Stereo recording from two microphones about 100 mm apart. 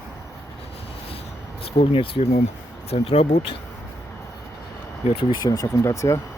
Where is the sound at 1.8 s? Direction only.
65° left (ahead or behind).